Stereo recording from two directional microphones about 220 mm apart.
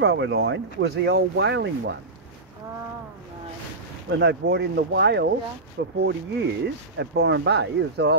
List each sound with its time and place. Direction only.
0.0 s speech: 50° right (ahead or behind)
4.1 s speech: 50° right (ahead or behind)